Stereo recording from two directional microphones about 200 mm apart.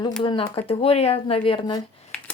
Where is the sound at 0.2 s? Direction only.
25° left (ahead or behind).